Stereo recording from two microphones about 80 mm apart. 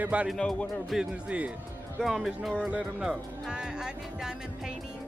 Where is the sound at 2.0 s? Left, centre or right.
Centre.